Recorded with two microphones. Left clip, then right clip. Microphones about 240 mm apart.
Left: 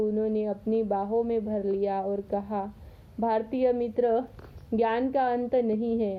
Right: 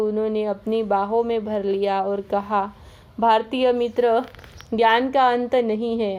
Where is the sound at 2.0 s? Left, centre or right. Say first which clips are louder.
Right 7 dB; right.